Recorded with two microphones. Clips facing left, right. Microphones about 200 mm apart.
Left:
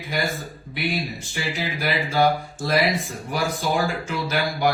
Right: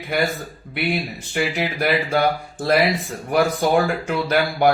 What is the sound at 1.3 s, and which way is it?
Speech, 60° right (ahead or behind).